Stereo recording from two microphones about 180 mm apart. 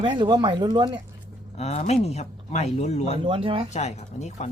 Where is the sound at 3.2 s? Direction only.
30° right (ahead or behind).